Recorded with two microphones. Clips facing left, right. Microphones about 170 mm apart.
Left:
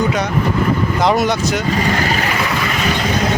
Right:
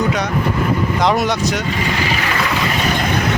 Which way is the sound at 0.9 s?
Centre (ahead or behind).